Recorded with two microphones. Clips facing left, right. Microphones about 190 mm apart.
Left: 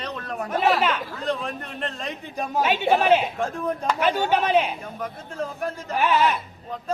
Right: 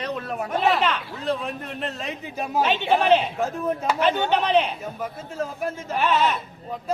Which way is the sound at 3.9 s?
10° left (ahead or behind).